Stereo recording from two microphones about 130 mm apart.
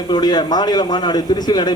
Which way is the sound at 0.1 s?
30° left (ahead or behind).